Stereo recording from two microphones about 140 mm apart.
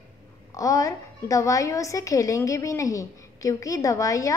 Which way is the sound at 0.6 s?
25° left (ahead or behind).